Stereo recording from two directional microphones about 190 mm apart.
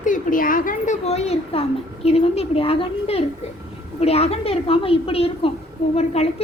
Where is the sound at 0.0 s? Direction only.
45° left (ahead or behind).